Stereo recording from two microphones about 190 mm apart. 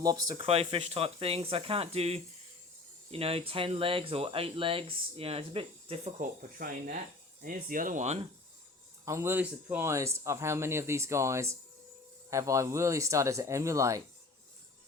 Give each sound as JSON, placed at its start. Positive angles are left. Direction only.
{"t": 0.0, "sound": "speech", "side_deg": -20}
{"t": 0.4, "sound": "speech", "side_deg": -30}
{"t": 6.1, "sound": "speech", "side_deg": -45}
{"t": 9.0, "sound": "speech", "side_deg": -15}